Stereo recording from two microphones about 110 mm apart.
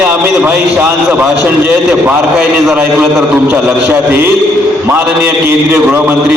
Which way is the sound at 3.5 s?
20° right (ahead or behind).